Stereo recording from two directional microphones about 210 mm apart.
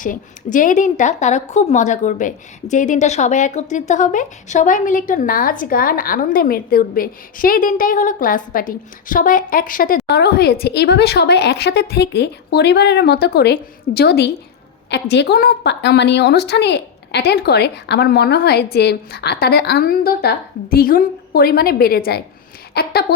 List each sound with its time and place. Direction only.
0.0 s a woman's voice: 40° left (ahead or behind)